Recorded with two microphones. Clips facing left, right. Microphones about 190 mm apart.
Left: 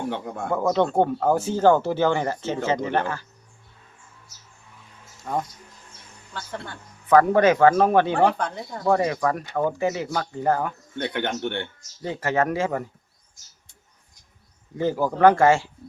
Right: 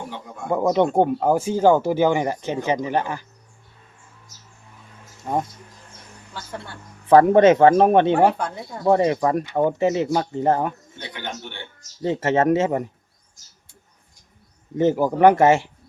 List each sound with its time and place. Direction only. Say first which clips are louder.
0.1 s speech: left 6 dB; 60° left (ahead or behind)
0.5 s speech: right 3 dB; 15° right (ahead or behind)
5.2 s speech: right 3 dB; 25° right (ahead or behind)
7.1 s speech: right 4 dB; 25° right (ahead or behind)
8.4 s speech: even; 5° right (ahead or behind)
8.8 s speech: right 4 dB; 25° right (ahead or behind)
10.9 s speech: left 7 dB; 60° left (ahead or behind)
12.0 s speech: right 5 dB; 25° right (ahead or behind)
14.8 s speech: right 3 dB; 20° right (ahead or behind)